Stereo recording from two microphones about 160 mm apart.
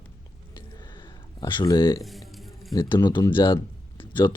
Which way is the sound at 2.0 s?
Centre (ahead or behind).